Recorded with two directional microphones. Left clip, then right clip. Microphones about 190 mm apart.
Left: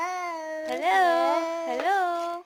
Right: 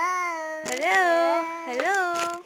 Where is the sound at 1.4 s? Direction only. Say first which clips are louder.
Left 1 dB; 45° left (ahead or behind).